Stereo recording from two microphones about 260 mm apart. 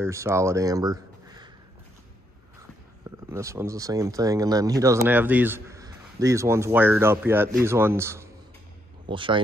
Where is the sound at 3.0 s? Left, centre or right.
Centre.